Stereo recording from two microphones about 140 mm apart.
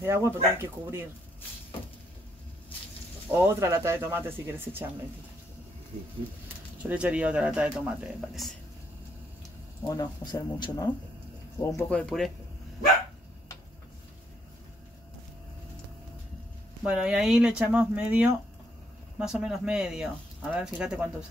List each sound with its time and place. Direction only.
0.0 s speech: 20° right (ahead or behind)
3.3 s speech: 20° right (ahead or behind)
6.8 s speech: 10° right (ahead or behind)
9.8 s speech: 25° left (ahead or behind)
11.9 s speech: 5° left (ahead or behind)
16.8 s speech: 5° right (ahead or behind)